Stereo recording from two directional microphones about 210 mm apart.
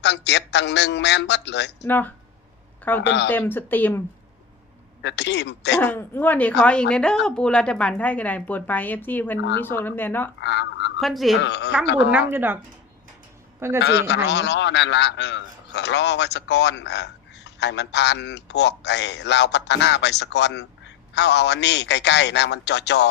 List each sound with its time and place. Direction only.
0.0 s a man's voice: 55° left (ahead or behind)
1.9 s a woman's voice: 10° left (ahead or behind)
5.0 s a man's voice: 55° left (ahead or behind)
5.8 s a woman's voice: 10° left (ahead or behind)
10.4 s a man's voice: 55° left (ahead or behind)
11.0 s speech: centre (ahead or behind)
11.3 s a man's voice: 55° left (ahead or behind)
12.1 s speech: 10° right (ahead or behind)
13.6 s speech: 10° right (ahead or behind)
13.8 s a man's voice: 55° left (ahead or behind)